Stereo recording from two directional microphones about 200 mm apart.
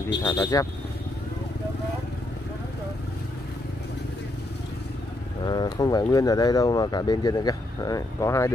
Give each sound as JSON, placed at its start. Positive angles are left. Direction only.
{"t": 0.2, "sound": "speech", "side_deg": 20}
{"t": 5.4, "sound": "speech", "side_deg": 20}